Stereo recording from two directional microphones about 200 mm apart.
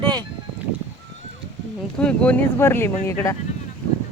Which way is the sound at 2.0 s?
5° left (ahead or behind).